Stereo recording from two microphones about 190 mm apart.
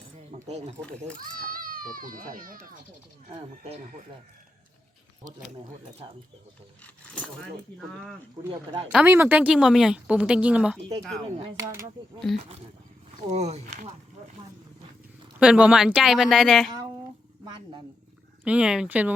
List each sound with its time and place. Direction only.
0.4 s speech: 35° right (ahead or behind)
0.8 s speech: 5° left (ahead or behind)
1.2 s a child's voice: 50° right (ahead or behind)
3.3 s speech: 35° right (ahead or behind)
6.8 s speech: 5° left (ahead or behind)
8.9 s speech: 5° right (ahead or behind)
11.5 s speech: 15° right (ahead or behind)
13.1 s speech: 35° right (ahead or behind)
15.4 s speech: 5° right (ahead or behind)
16.7 s a sound: 20° right (ahead or behind)
18.4 s speech: 5° right (ahead or behind)